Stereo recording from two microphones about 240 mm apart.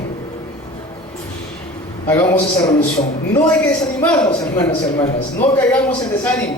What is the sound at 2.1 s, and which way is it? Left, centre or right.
A man's voice, centre.